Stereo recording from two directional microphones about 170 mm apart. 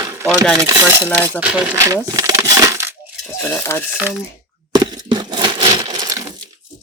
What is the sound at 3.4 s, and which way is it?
Speech, 15° left (ahead or behind).